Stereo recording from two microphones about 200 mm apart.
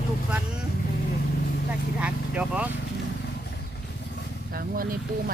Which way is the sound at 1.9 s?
5° right (ahead or behind).